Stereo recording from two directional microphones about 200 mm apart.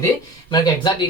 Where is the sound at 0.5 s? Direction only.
20° left (ahead or behind).